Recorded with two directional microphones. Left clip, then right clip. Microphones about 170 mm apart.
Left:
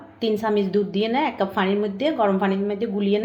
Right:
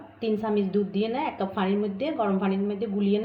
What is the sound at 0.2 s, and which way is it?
A woman's voice, 35° left (ahead or behind).